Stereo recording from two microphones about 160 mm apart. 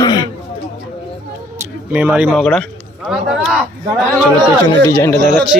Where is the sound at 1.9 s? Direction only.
10° right (ahead or behind).